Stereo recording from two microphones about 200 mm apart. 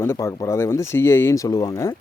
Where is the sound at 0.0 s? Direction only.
15° left (ahead or behind).